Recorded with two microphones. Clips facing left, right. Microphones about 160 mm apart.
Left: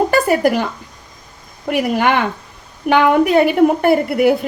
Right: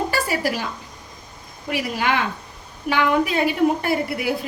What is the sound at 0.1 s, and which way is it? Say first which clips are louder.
A woman's voice: left 9 dB; 55° left (ahead or behind).